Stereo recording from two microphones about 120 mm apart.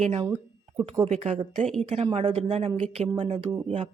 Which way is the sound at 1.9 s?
55° right (ahead or behind).